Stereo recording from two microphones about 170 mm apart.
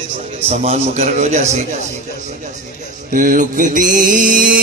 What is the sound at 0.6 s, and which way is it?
A man's voice, 40° right (ahead or behind).